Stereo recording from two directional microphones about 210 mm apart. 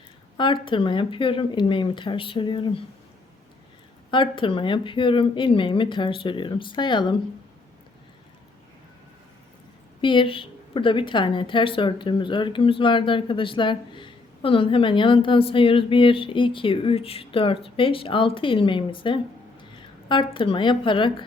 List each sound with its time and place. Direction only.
0.3 s a woman's voice: 25° left (ahead or behind)
4.1 s a woman's voice: 25° left (ahead or behind)
10.0 s a woman's voice: 25° left (ahead or behind)